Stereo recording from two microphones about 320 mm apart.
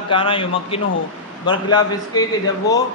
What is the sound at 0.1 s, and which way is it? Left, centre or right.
A man's voice, centre.